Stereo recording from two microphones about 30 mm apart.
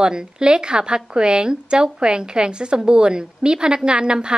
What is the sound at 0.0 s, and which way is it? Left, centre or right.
A woman's voice, right.